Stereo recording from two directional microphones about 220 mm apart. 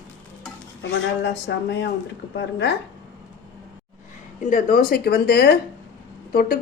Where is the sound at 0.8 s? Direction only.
50° left (ahead or behind).